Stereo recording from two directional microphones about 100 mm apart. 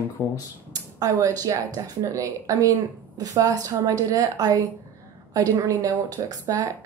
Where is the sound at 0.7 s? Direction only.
40° right (ahead or behind).